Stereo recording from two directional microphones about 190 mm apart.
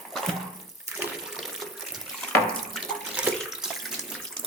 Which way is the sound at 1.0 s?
Centre (ahead or behind).